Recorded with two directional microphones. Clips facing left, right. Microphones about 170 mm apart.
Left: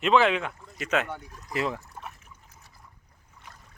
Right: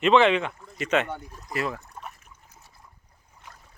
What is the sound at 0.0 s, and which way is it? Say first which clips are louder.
Speech: right 3 dB; 5° left (ahead or behind).